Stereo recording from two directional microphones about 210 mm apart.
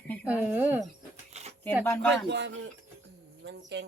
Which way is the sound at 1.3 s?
30° right (ahead or behind).